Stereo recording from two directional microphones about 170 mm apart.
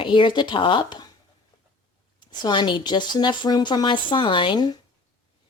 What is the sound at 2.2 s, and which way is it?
Speech, 25° left (ahead or behind).